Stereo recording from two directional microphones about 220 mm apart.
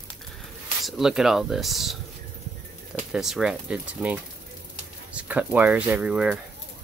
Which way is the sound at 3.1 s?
Centre (ahead or behind).